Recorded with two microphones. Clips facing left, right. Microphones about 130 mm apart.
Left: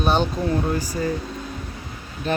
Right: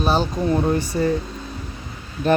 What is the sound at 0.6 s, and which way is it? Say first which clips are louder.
Speech: right 4 dB; 25° right (ahead or behind).